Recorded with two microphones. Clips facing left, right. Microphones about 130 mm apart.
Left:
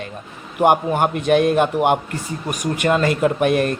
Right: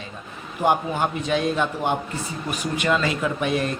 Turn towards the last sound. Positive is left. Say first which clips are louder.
# left 7 dB
turn(degrees=55)  # may be behind; listen again after turning